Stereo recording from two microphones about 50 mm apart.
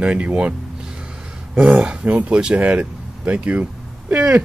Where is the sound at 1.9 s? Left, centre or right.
Right.